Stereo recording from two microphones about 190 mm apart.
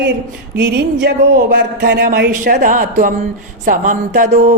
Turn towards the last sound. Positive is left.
turn(degrees=-40)  # may be behind; listen again after turning